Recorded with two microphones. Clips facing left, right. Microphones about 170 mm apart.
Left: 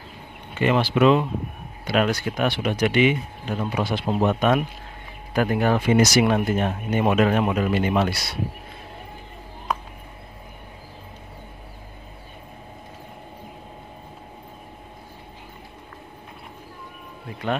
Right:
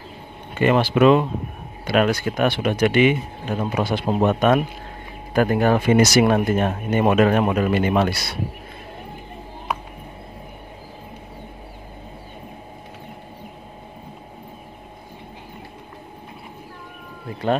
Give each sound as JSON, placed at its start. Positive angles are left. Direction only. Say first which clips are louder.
{"t": 0.6, "sound": "speech", "louder": "right 3 dB", "side_deg": -50}